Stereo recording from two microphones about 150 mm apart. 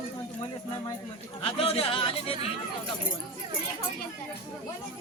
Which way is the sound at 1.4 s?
40° left (ahead or behind).